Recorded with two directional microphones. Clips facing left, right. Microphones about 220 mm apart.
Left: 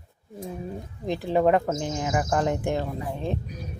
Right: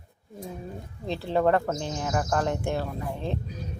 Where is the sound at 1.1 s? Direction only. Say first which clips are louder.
Left 2 dB; 15° left (ahead or behind).